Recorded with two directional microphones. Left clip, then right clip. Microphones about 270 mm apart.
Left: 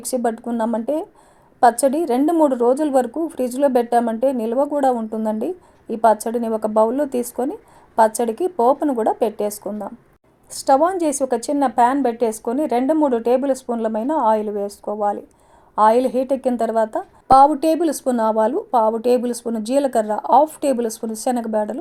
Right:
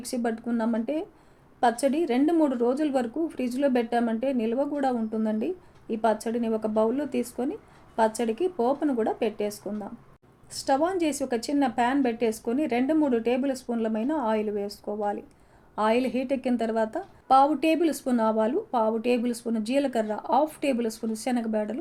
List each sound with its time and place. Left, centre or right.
0.0 s speech: left